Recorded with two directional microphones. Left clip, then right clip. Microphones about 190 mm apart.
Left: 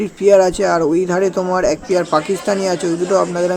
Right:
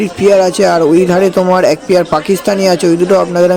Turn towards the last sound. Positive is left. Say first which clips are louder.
# right 7 dB
turn(degrees=-35)  # may be behind; listen again after turning